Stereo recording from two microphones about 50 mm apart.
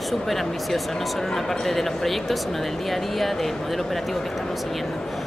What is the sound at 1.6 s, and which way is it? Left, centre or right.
Speech, centre.